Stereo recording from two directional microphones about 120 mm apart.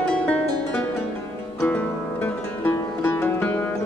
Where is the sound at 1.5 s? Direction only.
10° left (ahead or behind).